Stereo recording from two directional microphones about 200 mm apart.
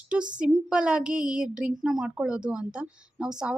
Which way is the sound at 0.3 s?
5° right (ahead or behind).